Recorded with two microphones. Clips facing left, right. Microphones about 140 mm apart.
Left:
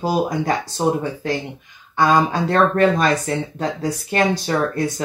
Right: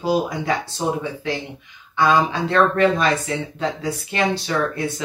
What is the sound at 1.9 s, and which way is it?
Speech, 40° left (ahead or behind).